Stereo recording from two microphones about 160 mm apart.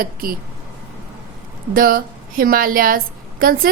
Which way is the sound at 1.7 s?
65° right (ahead or behind).